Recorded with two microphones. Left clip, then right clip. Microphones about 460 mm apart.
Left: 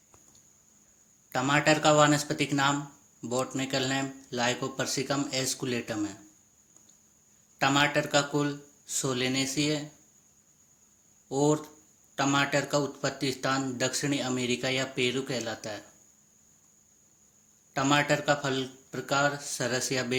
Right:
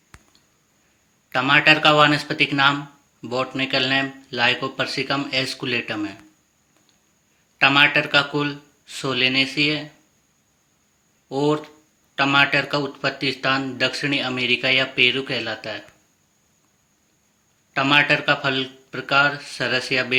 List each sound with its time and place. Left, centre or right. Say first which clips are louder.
1.3 s speech: right 9 dB; left
7.6 s speech: right 10 dB; left
11.3 s speech: right 5 dB; left
17.7 s speech: right 9 dB; left